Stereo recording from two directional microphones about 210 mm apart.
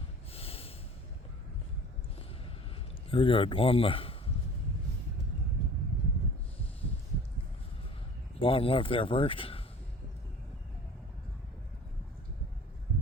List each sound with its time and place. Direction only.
0.3 s snort: 25° left (ahead or behind)
3.1 s speech: 25° left (ahead or behind)
8.4 s speech: 25° left (ahead or behind)